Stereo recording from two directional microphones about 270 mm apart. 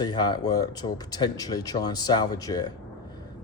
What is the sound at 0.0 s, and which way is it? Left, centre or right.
Speech, centre.